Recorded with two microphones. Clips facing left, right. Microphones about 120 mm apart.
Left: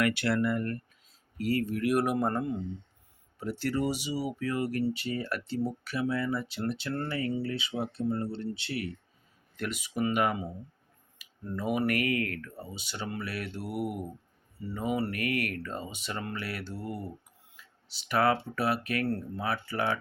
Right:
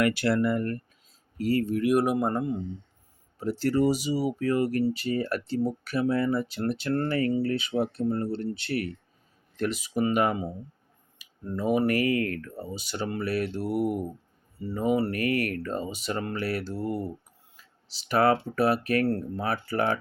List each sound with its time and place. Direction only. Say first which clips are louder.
0.0 s speech: right 3 dB; 35° right (ahead or behind); by 2.6 s 20° right (ahead or behind)
3.3 s speech: right 6 dB; 35° right (ahead or behind)
9.6 s speech: right 5 dB; 35° right (ahead or behind)
11.6 s speech: right 5 dB; 35° right (ahead or behind)
18.1 s speech: right 4 dB; 35° right (ahead or behind)